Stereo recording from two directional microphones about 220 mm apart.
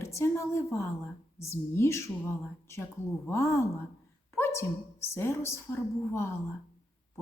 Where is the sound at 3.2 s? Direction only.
10° left (ahead or behind).